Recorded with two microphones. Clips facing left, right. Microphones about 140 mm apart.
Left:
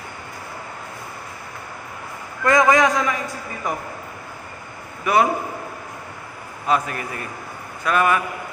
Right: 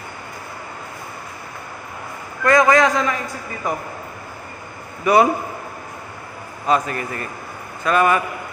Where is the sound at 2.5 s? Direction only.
20° left (ahead or behind).